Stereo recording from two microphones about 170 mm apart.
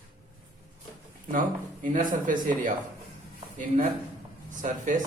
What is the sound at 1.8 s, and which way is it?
Speech, 50° right (ahead or behind).